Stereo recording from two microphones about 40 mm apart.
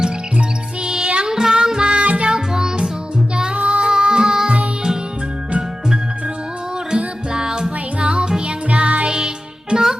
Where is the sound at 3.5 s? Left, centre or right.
Right.